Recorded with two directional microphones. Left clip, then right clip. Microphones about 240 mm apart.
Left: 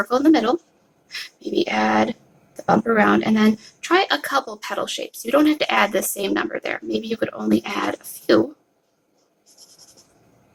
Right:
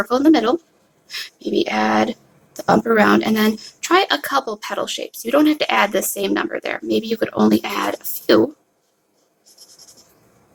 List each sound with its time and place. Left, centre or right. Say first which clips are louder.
0.0 s speech: right 2 dB; centre